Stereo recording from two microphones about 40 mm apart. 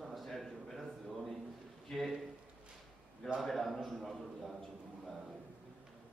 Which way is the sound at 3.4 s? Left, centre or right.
Centre.